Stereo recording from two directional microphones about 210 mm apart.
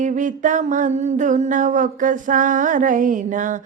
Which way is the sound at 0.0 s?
40° right (ahead or behind).